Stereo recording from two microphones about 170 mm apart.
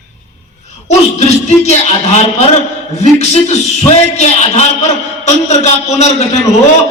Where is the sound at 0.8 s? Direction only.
40° left (ahead or behind).